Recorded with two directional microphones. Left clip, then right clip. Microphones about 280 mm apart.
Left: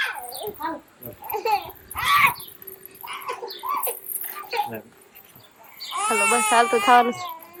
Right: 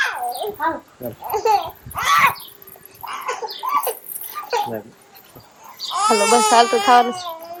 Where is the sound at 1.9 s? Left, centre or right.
Centre.